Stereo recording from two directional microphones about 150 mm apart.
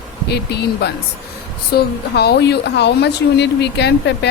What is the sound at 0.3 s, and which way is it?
A woman's voice, 90° left.